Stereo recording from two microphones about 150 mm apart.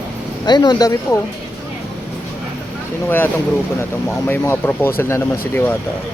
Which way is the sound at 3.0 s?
15° left (ahead or behind).